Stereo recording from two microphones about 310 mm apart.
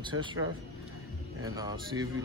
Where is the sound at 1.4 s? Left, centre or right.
Centre.